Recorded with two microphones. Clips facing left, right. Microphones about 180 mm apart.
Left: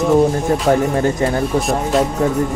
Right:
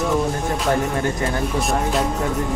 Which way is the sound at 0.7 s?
40° left (ahead or behind).